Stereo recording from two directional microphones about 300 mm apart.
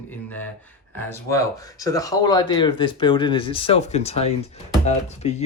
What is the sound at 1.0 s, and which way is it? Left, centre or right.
Speech, centre.